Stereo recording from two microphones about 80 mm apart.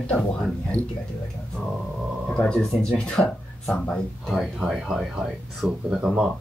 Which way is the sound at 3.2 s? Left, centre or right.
Left.